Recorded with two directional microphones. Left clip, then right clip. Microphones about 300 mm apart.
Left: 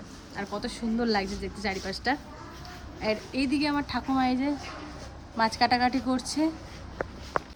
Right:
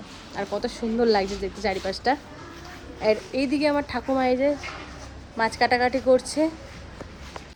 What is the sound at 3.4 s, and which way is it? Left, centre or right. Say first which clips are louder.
Speech: right 5 dB; centre.